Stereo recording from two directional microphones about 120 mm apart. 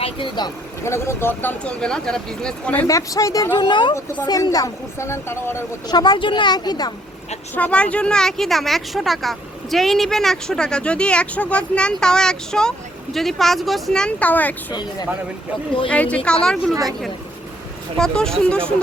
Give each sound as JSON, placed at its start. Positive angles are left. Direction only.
{"t": 0.0, "sound": "speech", "side_deg": 40}
{"t": 0.8, "sound": "speech", "side_deg": 20}
{"t": 2.8, "sound": "a woman's voice", "side_deg": 30}
{"t": 4.3, "sound": "a woman's voice", "side_deg": 30}
{"t": 5.9, "sound": "speech", "side_deg": 40}
{"t": 7.5, "sound": "speech", "side_deg": 10}
{"t": 15.9, "sound": "speech", "side_deg": 10}
{"t": 17.9, "sound": "speech", "side_deg": 5}